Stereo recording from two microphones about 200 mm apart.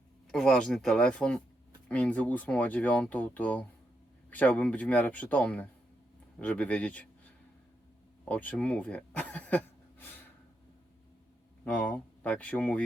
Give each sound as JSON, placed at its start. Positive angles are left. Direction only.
{"t": 0.3, "sound": "speech", "side_deg": 0}
{"t": 8.2, "sound": "speech", "side_deg": 10}
{"t": 11.6, "sound": "speech", "side_deg": 5}